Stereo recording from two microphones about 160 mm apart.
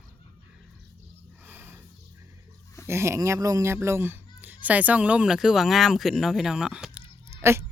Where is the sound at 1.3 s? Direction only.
10° right (ahead or behind).